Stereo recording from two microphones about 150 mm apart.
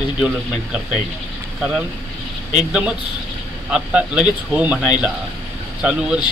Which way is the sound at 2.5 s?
5° right (ahead or behind).